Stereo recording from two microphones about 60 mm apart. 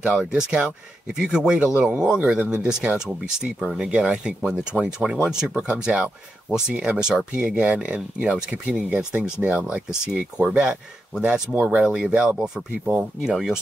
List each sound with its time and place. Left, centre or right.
0.3 s speech: centre
7.4 s speech: right; by 13.6 s centre